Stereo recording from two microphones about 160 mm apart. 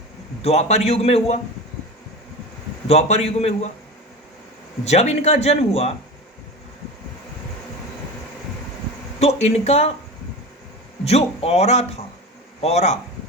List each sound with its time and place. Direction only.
0.4 s a man's voice: 40° left (ahead or behind)
2.8 s speech: 45° left (ahead or behind)
4.9 s speech: 45° left (ahead or behind)
9.1 s a man's voice: 40° left (ahead or behind)
11.0 s a man's voice: 40° left (ahead or behind)